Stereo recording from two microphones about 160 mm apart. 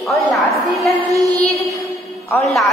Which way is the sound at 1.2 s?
20° right (ahead or behind).